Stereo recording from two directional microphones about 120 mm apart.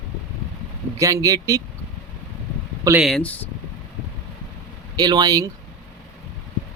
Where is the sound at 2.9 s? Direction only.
25° right (ahead or behind).